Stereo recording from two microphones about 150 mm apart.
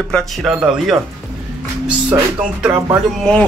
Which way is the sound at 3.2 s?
5° left (ahead or behind).